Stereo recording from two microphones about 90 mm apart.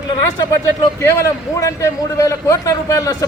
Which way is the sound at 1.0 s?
35° left (ahead or behind).